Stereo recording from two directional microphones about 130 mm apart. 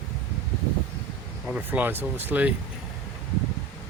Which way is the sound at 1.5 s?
15° right (ahead or behind).